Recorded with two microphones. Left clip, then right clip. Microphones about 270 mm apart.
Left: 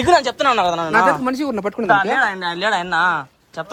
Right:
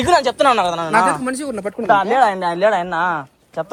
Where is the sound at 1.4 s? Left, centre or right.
Left.